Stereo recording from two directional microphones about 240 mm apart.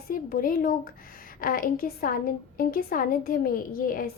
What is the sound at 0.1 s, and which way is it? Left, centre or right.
A woman's voice, left.